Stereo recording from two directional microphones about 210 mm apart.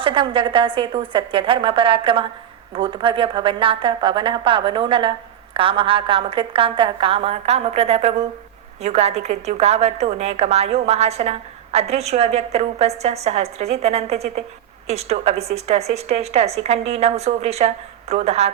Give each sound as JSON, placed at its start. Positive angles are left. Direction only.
{"t": 0.0, "sound": "a woman's voice", "side_deg": -25}